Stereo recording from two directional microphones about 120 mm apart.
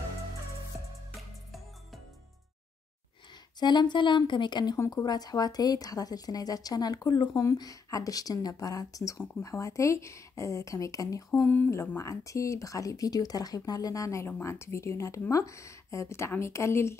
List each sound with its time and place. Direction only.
3.5 s a woman's voice: 35° left (ahead or behind)
11.4 s speech: 15° left (ahead or behind)